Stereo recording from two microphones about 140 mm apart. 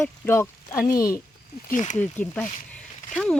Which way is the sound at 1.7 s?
60° left (ahead or behind).